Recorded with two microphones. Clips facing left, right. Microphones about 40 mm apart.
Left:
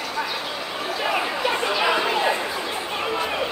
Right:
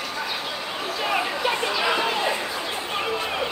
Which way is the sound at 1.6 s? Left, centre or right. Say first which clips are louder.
Left 3 dB; centre.